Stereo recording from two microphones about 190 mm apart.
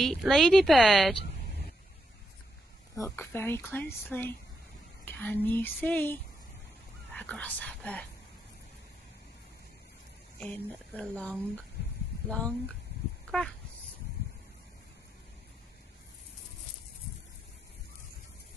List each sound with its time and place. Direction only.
0.0 s speech: centre (ahead or behind)
3.0 s a woman's voice: 10° left (ahead or behind)
7.2 s a woman's voice: 5° left (ahead or behind)
10.4 s a woman's voice: 5° left (ahead or behind)